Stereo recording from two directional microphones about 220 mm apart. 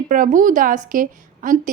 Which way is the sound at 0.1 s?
35° right (ahead or behind).